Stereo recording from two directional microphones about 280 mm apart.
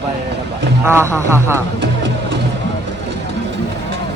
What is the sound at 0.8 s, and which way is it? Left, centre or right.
Speech, centre.